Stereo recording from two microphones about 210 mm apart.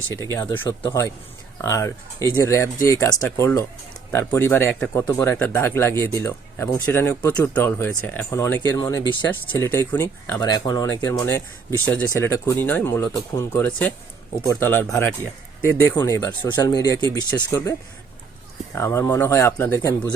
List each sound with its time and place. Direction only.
0.3 s speech: 10° left (ahead or behind)